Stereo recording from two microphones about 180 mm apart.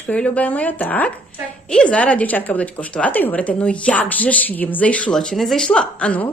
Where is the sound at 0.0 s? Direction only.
5° left (ahead or behind).